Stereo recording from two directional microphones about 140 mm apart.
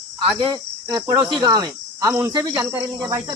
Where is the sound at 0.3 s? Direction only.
30° right (ahead or behind).